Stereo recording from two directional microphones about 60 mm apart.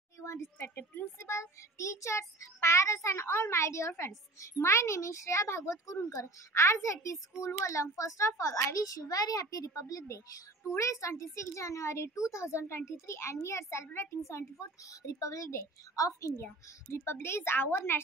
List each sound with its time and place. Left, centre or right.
0.6 s a woman's voice: left
1.2 s a child's voice: left
10.7 s a child's voice: left
16.9 s a child's voice: left